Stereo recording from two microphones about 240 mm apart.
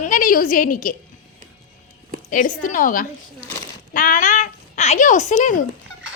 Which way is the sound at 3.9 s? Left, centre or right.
Left.